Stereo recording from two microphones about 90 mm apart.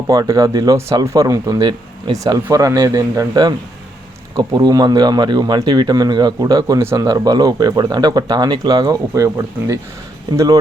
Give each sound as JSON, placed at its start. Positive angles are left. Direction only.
{"t": 0.1, "sound": "speech", "side_deg": -40}